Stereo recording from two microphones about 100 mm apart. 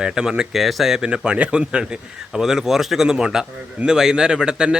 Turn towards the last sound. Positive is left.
turn(degrees=-10)  # may be behind; listen again after turning